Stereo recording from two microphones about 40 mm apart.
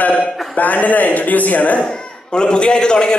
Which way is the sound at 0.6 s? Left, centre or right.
Left.